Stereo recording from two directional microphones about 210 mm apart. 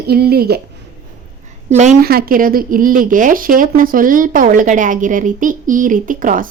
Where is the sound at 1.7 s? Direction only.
35° right (ahead or behind).